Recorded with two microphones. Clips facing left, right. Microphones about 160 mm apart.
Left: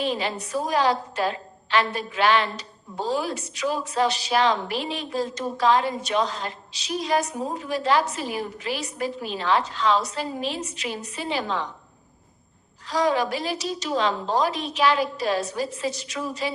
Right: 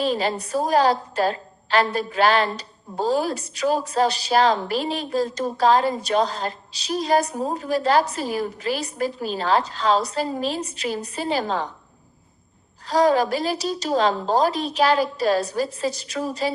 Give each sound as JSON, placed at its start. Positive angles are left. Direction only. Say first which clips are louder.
{"t": 0.0, "sound": "a woman's voice", "louder": "right 4 dB", "side_deg": -40}
{"t": 12.9, "sound": "a woman's voice", "louder": "right 4 dB", "side_deg": -35}